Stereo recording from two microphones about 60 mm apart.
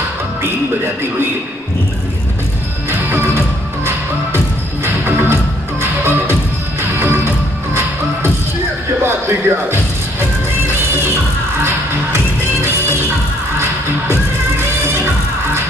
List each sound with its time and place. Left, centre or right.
2.9 s music: right
11.6 s music: right